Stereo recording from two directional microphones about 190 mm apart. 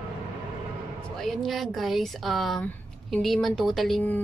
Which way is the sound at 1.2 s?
Centre (ahead or behind).